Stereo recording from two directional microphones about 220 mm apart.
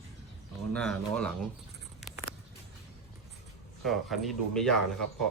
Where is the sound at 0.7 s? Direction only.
5° left (ahead or behind).